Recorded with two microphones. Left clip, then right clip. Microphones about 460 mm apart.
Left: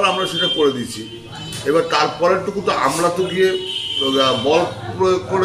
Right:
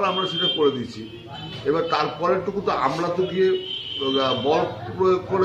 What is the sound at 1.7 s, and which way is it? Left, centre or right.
Speech, right.